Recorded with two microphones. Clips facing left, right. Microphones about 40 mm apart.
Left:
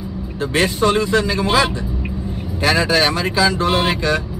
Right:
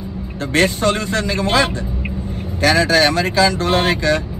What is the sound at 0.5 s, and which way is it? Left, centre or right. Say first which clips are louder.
Speech: right 1 dB; centre.